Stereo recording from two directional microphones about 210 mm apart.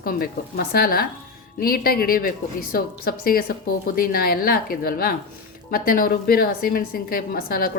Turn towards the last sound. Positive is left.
turn(degrees=45)  # may be behind; listen again after turning